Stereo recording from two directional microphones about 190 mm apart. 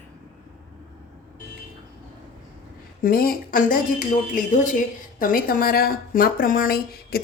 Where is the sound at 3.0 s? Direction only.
50° left (ahead or behind).